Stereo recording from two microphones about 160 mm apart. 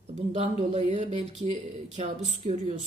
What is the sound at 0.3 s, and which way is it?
Speech, 45° right (ahead or behind).